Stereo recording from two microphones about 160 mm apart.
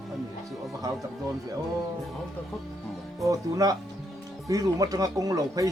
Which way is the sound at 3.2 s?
20° right (ahead or behind).